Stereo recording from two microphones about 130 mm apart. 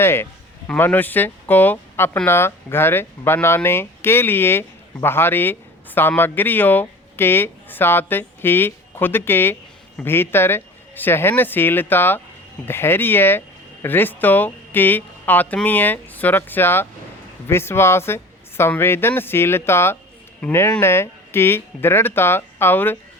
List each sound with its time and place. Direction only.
0.0 s speech: 20° left (ahead or behind)